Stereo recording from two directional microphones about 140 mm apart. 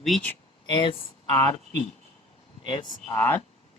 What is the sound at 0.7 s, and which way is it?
Speech, 30° left (ahead or behind).